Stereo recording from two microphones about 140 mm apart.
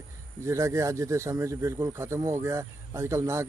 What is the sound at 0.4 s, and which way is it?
Speech, 20° right (ahead or behind).